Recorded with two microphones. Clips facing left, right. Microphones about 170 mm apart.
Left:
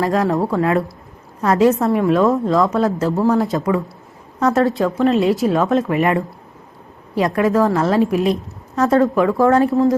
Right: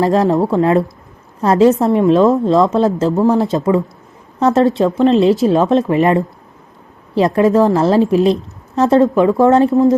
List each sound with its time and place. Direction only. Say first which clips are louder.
0.0 s a woman's voice: right 4 dB; 25° right (ahead or behind)
7.3 s a woman's voice: right 4 dB; 25° right (ahead or behind)